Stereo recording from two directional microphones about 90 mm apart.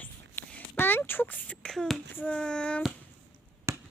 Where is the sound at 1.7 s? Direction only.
5° left (ahead or behind).